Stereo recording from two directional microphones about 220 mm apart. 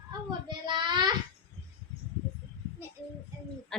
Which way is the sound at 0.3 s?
20° right (ahead or behind).